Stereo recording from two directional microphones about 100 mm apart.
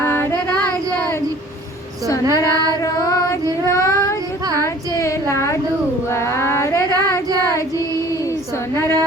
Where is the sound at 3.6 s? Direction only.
30° left (ahead or behind).